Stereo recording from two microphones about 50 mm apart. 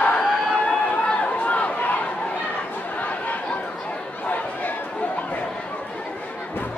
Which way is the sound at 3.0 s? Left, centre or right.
Left.